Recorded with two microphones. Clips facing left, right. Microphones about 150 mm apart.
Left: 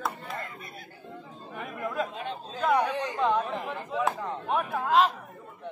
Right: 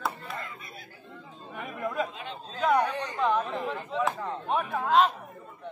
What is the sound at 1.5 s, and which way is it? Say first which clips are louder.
Speech: right 1 dB; centre (ahead or behind).